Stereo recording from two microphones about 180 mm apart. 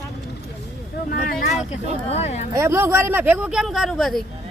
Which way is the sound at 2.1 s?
35° left (ahead or behind).